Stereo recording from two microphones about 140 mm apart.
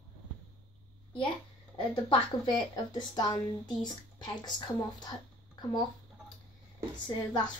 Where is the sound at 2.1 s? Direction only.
30° left (ahead or behind).